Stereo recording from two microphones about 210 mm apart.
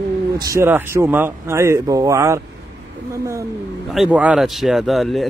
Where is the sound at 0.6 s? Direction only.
10° right (ahead or behind).